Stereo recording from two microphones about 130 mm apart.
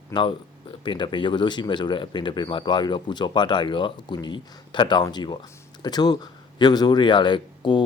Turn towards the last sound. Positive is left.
turn(degrees=35)  # may be behind; listen again after turning